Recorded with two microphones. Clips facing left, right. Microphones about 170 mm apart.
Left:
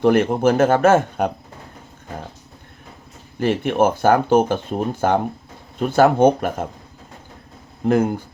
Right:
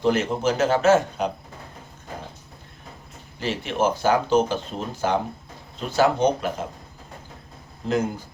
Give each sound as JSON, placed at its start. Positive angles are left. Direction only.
{"t": 0.0, "sound": "speech", "side_deg": 55}
{"t": 3.4, "sound": "speech", "side_deg": 55}
{"t": 7.9, "sound": "speech", "side_deg": 55}